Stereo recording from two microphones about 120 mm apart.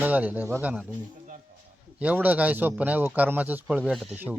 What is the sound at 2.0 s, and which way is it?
Speech, 15° right (ahead or behind).